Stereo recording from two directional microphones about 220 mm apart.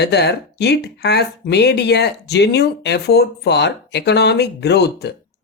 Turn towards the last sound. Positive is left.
turn(degrees=50)  # may be behind; listen again after turning